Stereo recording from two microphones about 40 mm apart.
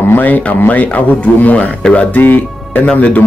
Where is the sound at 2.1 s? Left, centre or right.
Left.